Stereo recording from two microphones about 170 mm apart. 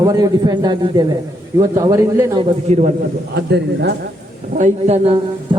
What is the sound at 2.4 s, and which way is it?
Speech, 40° right (ahead or behind).